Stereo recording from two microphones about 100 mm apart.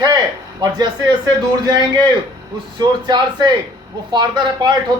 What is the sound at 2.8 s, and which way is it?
A man's voice, 45° right (ahead or behind).